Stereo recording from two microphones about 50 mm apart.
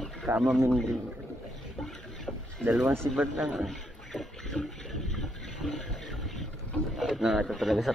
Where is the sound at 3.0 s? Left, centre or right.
Right.